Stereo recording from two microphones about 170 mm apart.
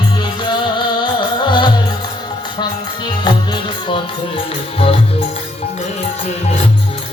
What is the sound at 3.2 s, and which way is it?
Music, 25° left (ahead or behind).